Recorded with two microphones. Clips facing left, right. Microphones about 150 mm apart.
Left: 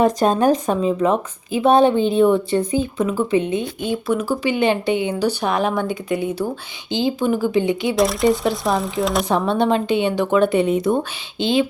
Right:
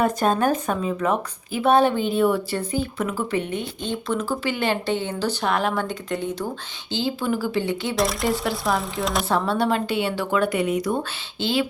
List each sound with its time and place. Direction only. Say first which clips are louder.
0.3 s a woman's voice: left 4 dB; 20° left (ahead or behind)
7.9 s speech: left 6 dB; centre (ahead or behind)
9.3 s a woman's voice: left 3 dB; 20° left (ahead or behind)